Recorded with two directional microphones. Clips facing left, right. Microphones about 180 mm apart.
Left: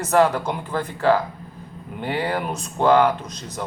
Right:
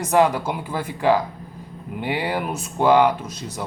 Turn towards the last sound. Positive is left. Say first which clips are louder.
# even
turn(degrees=-10)  # may be behind; listen again after turning